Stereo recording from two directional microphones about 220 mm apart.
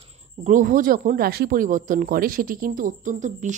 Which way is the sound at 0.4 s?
35° right (ahead or behind).